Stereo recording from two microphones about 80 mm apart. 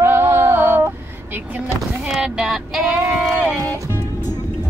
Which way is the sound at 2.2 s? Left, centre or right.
Centre.